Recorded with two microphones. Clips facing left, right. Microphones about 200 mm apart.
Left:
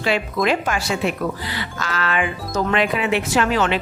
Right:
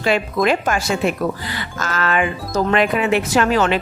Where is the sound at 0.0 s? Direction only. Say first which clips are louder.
Right 3 dB; 45° right (ahead or behind).